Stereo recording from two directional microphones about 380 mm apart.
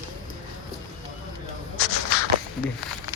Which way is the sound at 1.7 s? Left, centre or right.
Right.